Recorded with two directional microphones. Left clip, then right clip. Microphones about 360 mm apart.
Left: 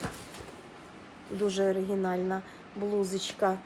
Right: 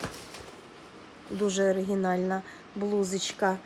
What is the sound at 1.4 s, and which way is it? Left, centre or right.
Speech, right.